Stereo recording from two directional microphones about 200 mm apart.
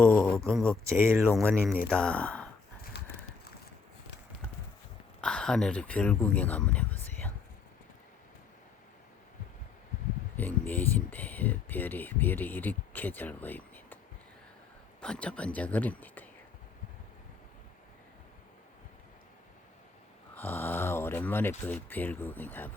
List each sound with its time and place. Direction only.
0.0 s speech: 5° left (ahead or behind)
0.9 s speech: 15° right (ahead or behind)
1.9 s speech: 5° left (ahead or behind)
2.9 s clip-clop: 55° left (ahead or behind)
5.2 s speech: 5° left (ahead or behind)
10.3 s speech: 10° left (ahead or behind)
15.0 s speech: 5° left (ahead or behind)
20.3 s speech: 10° left (ahead or behind)